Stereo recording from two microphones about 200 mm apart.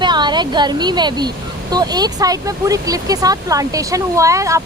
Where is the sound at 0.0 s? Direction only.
20° right (ahead or behind).